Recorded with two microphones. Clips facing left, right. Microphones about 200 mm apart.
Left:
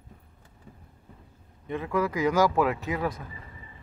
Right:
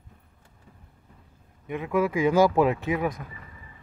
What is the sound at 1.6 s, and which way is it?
Speech, 15° right (ahead or behind).